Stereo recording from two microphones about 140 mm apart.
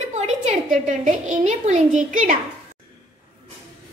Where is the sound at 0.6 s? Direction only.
70° right (ahead or behind).